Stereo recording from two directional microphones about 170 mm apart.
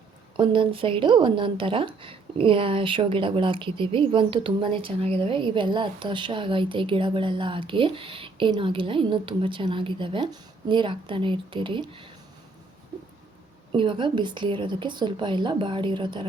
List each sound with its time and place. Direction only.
0.3 s a woman's voice: 30° right (ahead or behind)
13.7 s a woman's voice: 30° right (ahead or behind)